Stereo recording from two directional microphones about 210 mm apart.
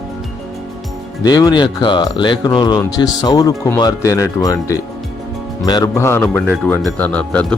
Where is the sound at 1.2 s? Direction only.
20° left (ahead or behind).